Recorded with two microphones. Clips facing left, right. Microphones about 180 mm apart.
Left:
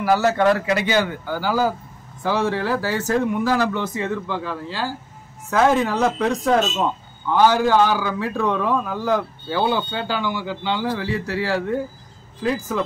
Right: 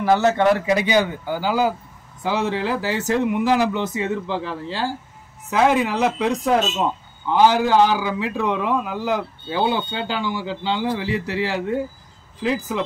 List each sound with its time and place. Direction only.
0.0 s a man's voice: 20° right (ahead or behind)
5.5 s a man's voice: 15° right (ahead or behind)